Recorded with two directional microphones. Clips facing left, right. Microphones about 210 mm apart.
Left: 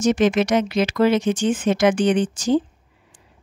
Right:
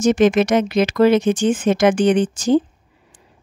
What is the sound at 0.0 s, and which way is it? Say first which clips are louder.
Speech: right 3 dB; 50° right (ahead or behind).